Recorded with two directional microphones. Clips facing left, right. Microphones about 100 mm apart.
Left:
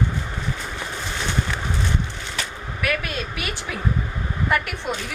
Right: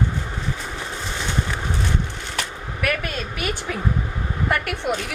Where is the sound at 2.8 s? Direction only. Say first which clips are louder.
Right 1 dB; 45° right (ahead or behind).